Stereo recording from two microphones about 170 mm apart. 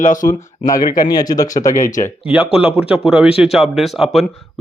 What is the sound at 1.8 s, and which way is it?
Speech, 50° left (ahead or behind).